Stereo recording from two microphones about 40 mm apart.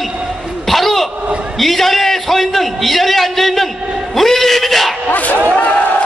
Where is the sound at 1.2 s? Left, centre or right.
Right.